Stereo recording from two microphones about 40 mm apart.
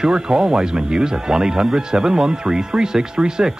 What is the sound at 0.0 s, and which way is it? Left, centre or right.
Speech, centre.